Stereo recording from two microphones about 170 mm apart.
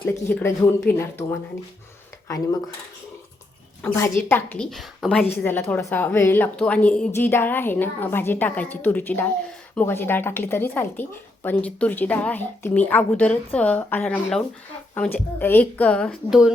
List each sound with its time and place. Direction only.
0.0 s a woman's voice: 10° left (ahead or behind)
2.2 s speech: 20° left (ahead or behind)
3.8 s a woman's voice: 15° left (ahead or behind)